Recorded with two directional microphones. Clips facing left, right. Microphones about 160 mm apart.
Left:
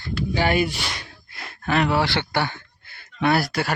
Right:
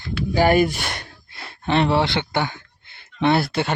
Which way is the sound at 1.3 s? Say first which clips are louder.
Right 2 dB; 25° right (ahead or behind).